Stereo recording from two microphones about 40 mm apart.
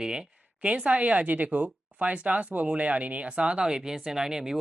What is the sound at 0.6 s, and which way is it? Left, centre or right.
Speech, right.